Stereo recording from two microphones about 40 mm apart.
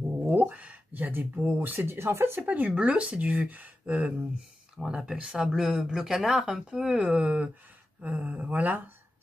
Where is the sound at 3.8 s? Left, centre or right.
Right.